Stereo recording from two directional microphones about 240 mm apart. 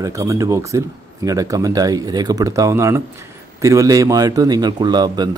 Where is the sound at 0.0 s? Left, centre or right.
Centre.